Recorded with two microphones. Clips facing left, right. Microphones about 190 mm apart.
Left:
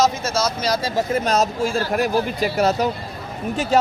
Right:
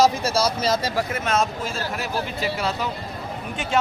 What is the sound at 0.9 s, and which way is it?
Speech, 35° left (ahead or behind).